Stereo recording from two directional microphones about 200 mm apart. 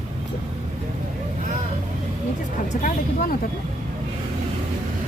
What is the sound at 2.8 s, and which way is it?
Speech, 40° left (ahead or behind).